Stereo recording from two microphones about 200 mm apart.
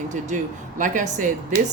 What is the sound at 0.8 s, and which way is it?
Speech, 40° right (ahead or behind).